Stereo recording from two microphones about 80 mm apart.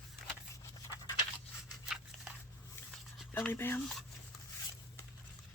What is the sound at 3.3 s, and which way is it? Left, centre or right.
Speech, left.